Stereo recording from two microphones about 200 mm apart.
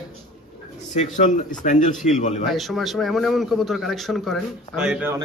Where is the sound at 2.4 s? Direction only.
Centre (ahead or behind).